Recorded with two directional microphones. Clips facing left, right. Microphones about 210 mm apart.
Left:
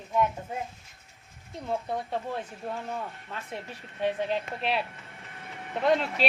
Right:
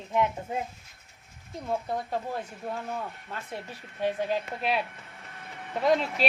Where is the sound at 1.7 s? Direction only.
5° right (ahead or behind).